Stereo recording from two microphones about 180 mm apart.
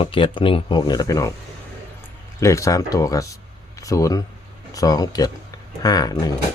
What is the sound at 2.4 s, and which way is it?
Speech, 15° left (ahead or behind).